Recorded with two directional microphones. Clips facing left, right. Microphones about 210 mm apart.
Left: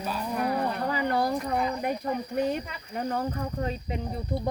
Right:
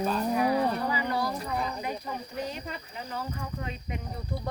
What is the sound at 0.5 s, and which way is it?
Speech, 55° left (ahead or behind).